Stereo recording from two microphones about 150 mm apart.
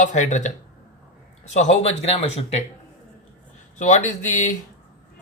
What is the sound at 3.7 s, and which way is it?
Speech, 55° left (ahead or behind).